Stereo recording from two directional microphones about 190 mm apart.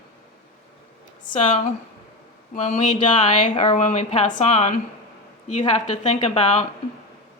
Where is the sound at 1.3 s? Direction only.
40° left (ahead or behind).